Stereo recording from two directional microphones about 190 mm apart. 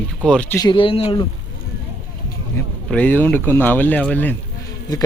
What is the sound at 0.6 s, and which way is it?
Speech, 25° left (ahead or behind).